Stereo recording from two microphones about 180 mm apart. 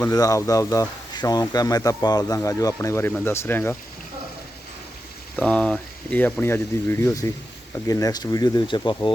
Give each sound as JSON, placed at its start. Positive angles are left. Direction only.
{"t": 0.0, "sound": "speech", "side_deg": 20}
{"t": 5.4, "sound": "speech", "side_deg": 5}